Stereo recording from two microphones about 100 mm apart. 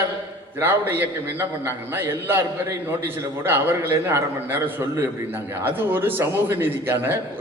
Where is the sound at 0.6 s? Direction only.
20° right (ahead or behind).